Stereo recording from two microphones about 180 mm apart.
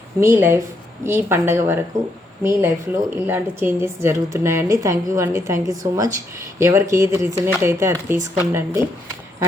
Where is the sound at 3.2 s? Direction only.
10° right (ahead or behind).